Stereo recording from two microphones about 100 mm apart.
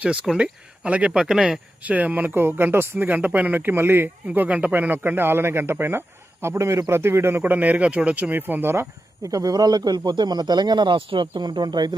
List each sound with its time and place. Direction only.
0.0 s speech: 10° right (ahead or behind); by 11.9 s 45° right (ahead or behind)